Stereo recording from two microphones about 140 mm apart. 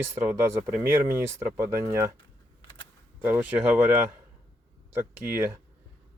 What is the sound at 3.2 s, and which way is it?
Speech, 15° right (ahead or behind).